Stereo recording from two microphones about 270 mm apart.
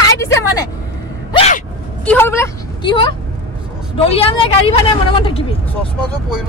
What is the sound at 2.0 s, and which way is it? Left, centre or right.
Speech, centre.